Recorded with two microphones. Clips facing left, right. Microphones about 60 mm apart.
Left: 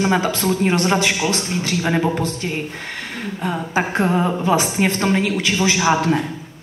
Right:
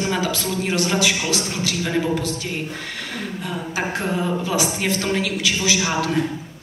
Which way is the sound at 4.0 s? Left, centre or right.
Left.